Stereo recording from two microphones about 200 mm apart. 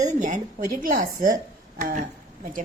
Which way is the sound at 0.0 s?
40° right (ahead or behind).